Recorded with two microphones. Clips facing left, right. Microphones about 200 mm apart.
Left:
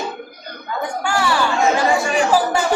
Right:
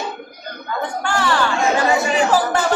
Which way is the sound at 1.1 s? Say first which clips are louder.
Even; 10° left (ahead or behind).